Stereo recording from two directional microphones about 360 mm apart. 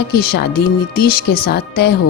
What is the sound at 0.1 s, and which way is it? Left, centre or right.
Speech, left.